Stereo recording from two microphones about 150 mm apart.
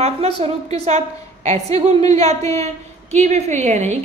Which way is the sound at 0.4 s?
45° right (ahead or behind).